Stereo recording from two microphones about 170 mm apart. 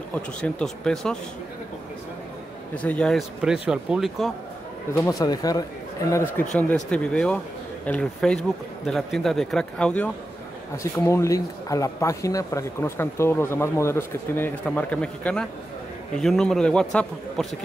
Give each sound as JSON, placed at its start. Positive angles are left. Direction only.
{"t": 0.1, "sound": "speech", "side_deg": 5}
{"t": 2.7, "sound": "speech", "side_deg": 10}
{"t": 4.9, "sound": "speech", "side_deg": 20}
{"t": 6.5, "sound": "speech", "side_deg": 5}
{"t": 10.8, "sound": "speech", "side_deg": 15}